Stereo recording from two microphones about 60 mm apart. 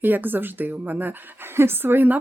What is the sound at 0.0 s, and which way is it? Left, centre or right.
Speech, right.